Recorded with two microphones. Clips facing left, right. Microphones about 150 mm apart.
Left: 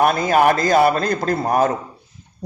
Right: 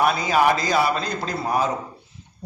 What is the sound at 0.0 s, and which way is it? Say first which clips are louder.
A man's voice: left 4 dB; 50° left (ahead or behind).